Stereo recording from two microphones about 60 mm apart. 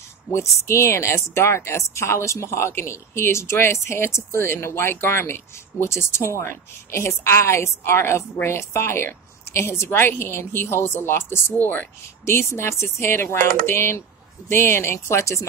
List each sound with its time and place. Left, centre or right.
0.3 s speech: left
12.3 s speech: left